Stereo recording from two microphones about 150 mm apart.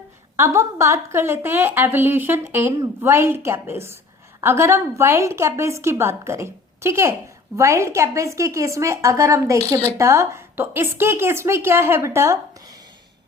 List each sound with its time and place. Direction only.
0.3 s a woman's voice: 20° right (ahead or behind)